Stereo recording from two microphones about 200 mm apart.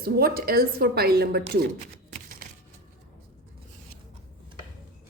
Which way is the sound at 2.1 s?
45° right (ahead or behind).